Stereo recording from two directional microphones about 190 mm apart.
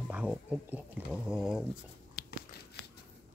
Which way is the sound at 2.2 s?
60° left (ahead or behind).